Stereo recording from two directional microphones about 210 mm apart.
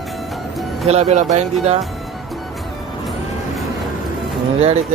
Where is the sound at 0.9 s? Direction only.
30° right (ahead or behind).